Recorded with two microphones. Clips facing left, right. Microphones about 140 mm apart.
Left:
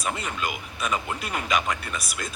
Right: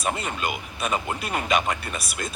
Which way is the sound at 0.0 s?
30° right (ahead or behind).